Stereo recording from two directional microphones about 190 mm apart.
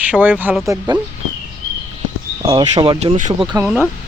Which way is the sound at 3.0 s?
35° right (ahead or behind).